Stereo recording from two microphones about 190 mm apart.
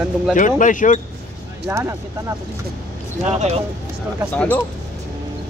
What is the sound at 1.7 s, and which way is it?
Speech, 15° right (ahead or behind).